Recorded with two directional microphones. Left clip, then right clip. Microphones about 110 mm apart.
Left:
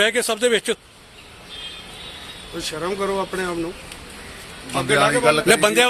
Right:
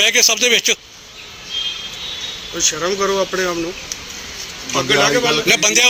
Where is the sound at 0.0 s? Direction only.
35° left (ahead or behind).